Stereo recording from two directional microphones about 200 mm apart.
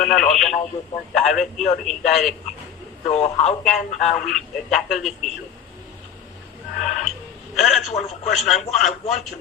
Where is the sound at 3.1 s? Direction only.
30° left (ahead or behind).